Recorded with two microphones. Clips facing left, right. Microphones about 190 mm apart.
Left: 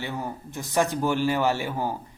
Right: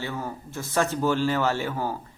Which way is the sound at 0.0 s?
15° left (ahead or behind).